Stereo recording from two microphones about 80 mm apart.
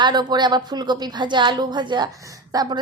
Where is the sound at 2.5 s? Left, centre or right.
Right.